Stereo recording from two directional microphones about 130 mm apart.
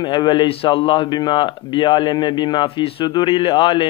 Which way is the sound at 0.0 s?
35° left (ahead or behind).